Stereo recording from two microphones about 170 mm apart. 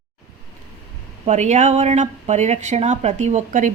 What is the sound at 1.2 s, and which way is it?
Speech, 40° right (ahead or behind).